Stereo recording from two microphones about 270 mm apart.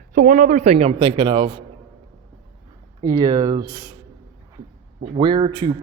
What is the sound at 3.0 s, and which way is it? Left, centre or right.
Speech, centre.